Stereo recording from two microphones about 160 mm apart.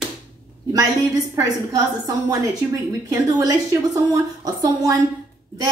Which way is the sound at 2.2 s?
20° right (ahead or behind).